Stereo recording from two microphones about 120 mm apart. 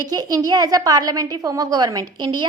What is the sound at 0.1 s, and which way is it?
A woman's voice, 35° right (ahead or behind).